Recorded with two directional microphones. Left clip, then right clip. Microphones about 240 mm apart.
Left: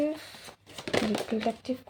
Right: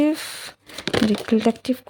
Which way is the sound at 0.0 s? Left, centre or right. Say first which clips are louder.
Right 9 dB; right.